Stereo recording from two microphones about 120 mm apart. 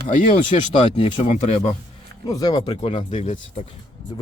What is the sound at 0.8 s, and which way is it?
Speech, 45° left (ahead or behind).